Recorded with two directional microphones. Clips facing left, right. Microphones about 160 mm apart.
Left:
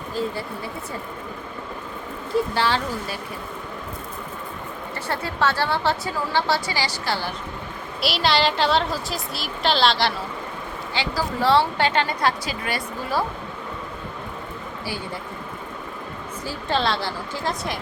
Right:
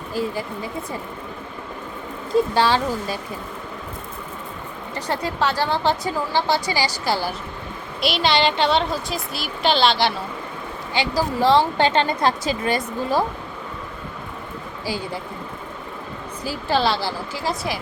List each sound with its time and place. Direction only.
0.1 s a woman's voice: 10° right (ahead or behind)
2.6 s a woman's voice: 15° right (ahead or behind)
4.9 s a woman's voice: 15° right (ahead or behind)
8.0 s a woman's voice: centre (ahead or behind)
10.9 s speech: 15° right (ahead or behind)
16.4 s a woman's voice: 10° right (ahead or behind)